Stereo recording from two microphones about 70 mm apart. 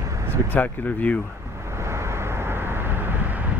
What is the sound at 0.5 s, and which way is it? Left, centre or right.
Speech, left.